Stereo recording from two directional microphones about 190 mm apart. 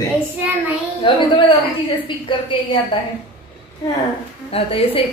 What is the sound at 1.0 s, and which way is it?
A woman's voice, 25° left (ahead or behind).